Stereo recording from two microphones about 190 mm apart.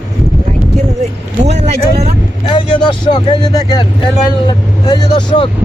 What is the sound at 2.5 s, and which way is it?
Speech, 25° left (ahead or behind).